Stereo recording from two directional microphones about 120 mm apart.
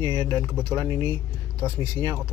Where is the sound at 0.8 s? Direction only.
25° right (ahead or behind).